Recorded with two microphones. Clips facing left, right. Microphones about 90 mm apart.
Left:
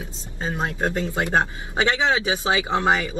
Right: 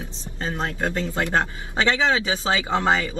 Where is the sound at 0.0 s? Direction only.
20° left (ahead or behind).